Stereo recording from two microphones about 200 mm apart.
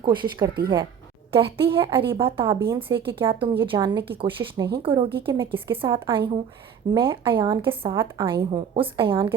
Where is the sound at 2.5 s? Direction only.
10° right (ahead or behind).